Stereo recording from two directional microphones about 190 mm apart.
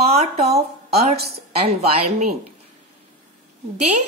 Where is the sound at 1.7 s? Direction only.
35° right (ahead or behind).